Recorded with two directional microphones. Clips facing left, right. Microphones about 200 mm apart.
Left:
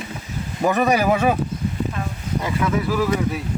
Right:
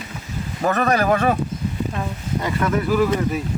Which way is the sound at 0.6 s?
15° left (ahead or behind).